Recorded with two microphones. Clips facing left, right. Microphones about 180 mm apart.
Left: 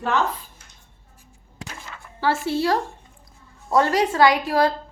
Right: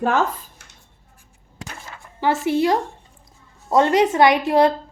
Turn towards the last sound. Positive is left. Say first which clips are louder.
# right 3 dB
turn(degrees=-25)  # may be behind; listen again after turning